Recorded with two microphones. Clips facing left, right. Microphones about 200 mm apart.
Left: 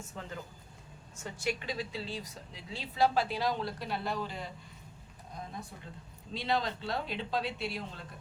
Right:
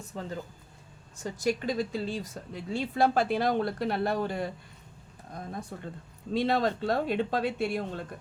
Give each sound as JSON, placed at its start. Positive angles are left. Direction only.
{"t": 0.0, "sound": "speech", "side_deg": -35}